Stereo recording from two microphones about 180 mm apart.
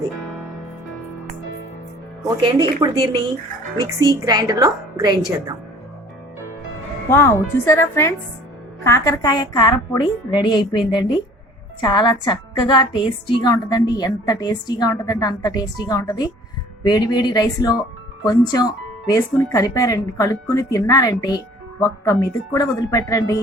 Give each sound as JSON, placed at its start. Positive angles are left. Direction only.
{"t": 2.2, "sound": "a woman's voice", "side_deg": -25}
{"t": 7.1, "sound": "a woman's voice", "side_deg": 15}